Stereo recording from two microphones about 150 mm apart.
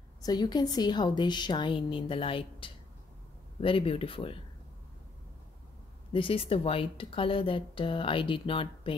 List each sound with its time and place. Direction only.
0.2 s a woman's voice: 25° left (ahead or behind)
6.1 s speech: 35° left (ahead or behind)